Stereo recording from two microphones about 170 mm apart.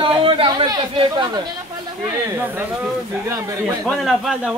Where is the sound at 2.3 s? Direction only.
10° right (ahead or behind).